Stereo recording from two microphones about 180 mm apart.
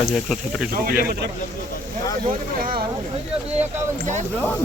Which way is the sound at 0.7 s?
55° right (ahead or behind).